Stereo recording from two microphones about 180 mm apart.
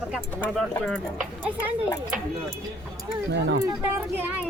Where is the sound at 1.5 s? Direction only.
10° right (ahead or behind).